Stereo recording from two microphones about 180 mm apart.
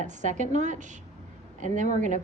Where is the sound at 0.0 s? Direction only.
40° right (ahead or behind).